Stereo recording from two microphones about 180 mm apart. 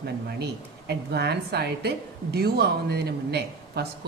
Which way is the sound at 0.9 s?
65° right (ahead or behind).